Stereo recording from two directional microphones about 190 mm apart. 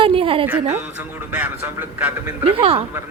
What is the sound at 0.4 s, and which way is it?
Speech, 10° right (ahead or behind).